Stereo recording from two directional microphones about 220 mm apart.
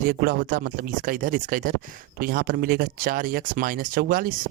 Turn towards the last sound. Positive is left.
turn(degrees=-40)  # may be behind; listen again after turning